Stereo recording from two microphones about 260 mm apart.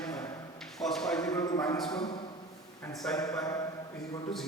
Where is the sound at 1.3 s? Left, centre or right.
Centre.